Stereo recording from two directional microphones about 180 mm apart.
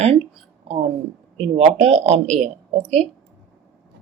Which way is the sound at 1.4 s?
40° right (ahead or behind).